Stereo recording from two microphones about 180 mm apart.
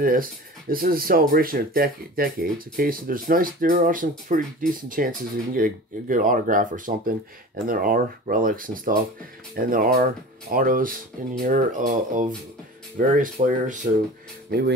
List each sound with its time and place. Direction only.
0.0 s speech: 50° right (ahead or behind)